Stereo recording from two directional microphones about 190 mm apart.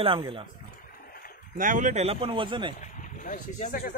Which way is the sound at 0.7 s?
50° left (ahead or behind).